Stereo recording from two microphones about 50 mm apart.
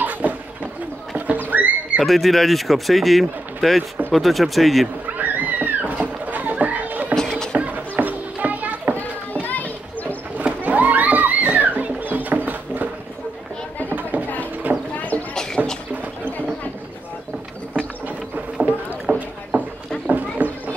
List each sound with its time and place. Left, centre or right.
0.0 s a sound: right
2.0 s speech: centre
5.0 s cat: right
7.2 s a sound: centre
7.5 s children playing: right
9.5 s children playing: left
10.3 s music: right
12.1 s a sound: right
14.7 s clip-clop: right
15.0 s horse: left
15.3 s a sound: centre
17.7 s ratchet: right
19.0 s rowboat: right
20.1 s horse: right